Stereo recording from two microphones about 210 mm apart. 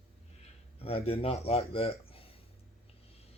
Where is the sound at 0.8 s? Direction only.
30° left (ahead or behind).